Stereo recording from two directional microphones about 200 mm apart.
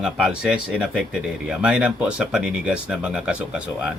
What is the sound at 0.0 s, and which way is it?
Speech, 5° right (ahead or behind).